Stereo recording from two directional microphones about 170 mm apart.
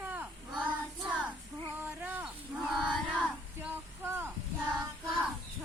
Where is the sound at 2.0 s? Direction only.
5° right (ahead or behind).